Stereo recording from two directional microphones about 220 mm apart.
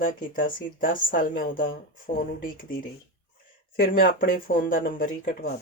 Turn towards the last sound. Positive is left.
turn(degrees=35)  # may be behind; listen again after turning